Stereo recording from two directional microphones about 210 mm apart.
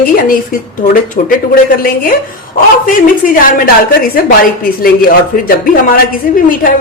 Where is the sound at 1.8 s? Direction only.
40° left (ahead or behind).